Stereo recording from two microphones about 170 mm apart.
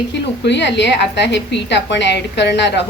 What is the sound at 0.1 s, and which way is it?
A woman's voice, 90° left.